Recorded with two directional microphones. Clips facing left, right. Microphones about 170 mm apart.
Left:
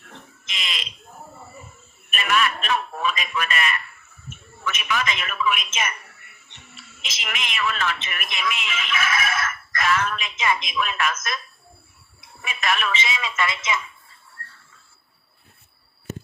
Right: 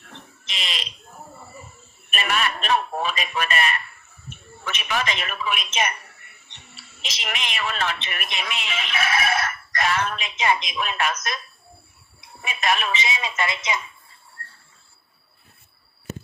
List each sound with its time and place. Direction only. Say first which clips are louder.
0.0 s fire alarm: even; 35° right (ahead or behind)
2.0 s a sound: left 2 dB; 35° right (ahead or behind)
10.8 s speech: even; 30° right (ahead or behind)
12.4 s speech: right 1 dB; 30° right (ahead or behind)
14.4 s train: even; 30° left (ahead or behind)